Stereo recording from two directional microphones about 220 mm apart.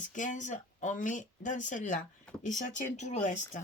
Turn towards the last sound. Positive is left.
turn(degrees=35)  # may be behind; listen again after turning